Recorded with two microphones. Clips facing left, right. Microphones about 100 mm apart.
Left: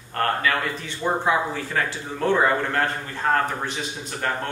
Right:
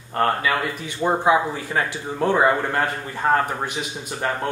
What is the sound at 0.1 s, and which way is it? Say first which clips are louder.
A man's voice: right 2 dB; 15° right (ahead or behind).